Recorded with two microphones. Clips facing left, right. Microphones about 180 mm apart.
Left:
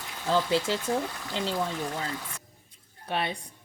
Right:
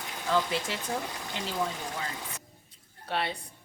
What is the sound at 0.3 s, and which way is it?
Speech, 30° left (ahead or behind).